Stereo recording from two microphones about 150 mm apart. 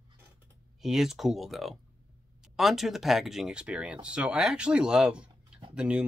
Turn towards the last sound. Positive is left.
turn(degrees=-5)  # may be behind; listen again after turning